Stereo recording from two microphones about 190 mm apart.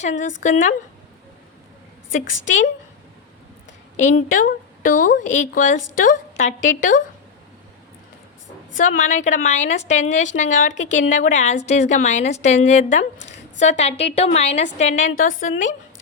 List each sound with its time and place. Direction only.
0.0 s a woman's voice: 40° left (ahead or behind)
3.9 s a woman's voice: 40° left (ahead or behind)
8.8 s a woman's voice: 40° left (ahead or behind)